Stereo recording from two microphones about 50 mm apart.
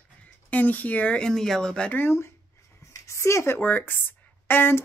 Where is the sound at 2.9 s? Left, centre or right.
Left.